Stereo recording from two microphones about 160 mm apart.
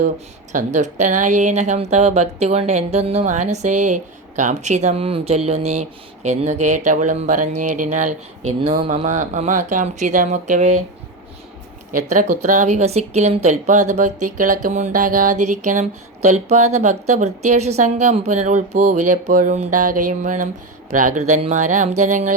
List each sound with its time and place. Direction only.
0.5 s a woman's voice: 50° right (ahead or behind)
8.6 s speech: 35° right (ahead or behind)
9.0 s a woman's voice: 50° right (ahead or behind)
12.1 s a woman's voice: 55° right (ahead or behind)